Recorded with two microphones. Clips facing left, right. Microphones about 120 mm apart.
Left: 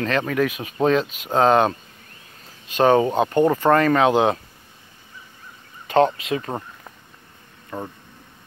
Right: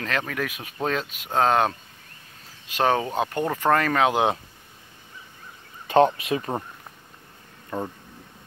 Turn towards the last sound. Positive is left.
turn(degrees=15)  # may be behind; listen again after turning